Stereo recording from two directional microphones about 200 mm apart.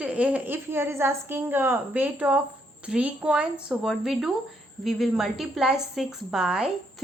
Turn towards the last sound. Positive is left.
turn(degrees=-5)  # may be behind; listen again after turning